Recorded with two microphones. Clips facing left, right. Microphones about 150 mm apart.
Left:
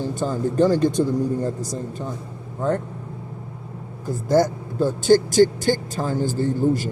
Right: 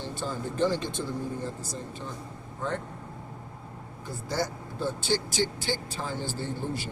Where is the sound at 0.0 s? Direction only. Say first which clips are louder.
Left 10 dB; 45° left (ahead or behind).